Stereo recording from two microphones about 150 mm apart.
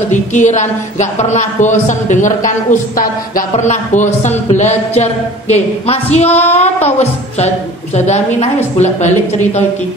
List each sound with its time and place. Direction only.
0.1 s a woman's voice: 55° left (ahead or behind)